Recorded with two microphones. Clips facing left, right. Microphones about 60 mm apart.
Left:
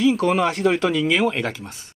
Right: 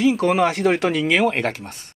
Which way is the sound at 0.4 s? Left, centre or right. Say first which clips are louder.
Right 1 dB; right.